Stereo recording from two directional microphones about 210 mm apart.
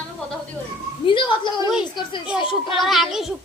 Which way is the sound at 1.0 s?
25° left (ahead or behind).